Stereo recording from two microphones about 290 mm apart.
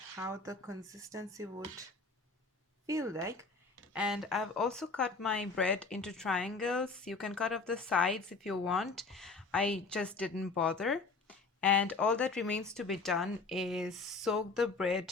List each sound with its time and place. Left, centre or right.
0.2 s speech: centre
2.8 s speech: centre